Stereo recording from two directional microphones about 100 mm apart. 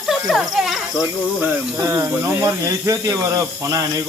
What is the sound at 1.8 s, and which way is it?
Speech, 25° right (ahead or behind).